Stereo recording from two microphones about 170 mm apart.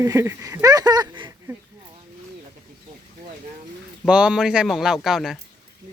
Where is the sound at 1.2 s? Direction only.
25° right (ahead or behind).